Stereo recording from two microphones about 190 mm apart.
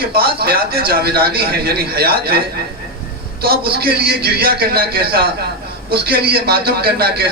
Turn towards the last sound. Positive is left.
turn(degrees=-55)  # may be behind; listen again after turning